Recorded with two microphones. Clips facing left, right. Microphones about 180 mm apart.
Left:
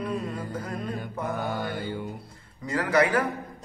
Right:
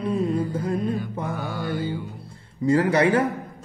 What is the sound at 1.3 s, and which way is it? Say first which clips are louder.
Mantra: left 2 dB; 50° left (ahead or behind).